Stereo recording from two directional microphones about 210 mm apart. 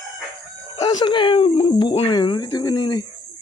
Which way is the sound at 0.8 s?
20° left (ahead or behind).